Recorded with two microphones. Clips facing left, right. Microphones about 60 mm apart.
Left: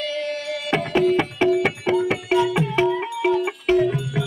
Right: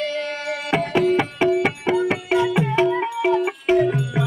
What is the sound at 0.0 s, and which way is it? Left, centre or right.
Music, right.